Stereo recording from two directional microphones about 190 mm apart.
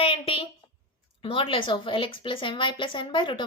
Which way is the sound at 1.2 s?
30° left (ahead or behind).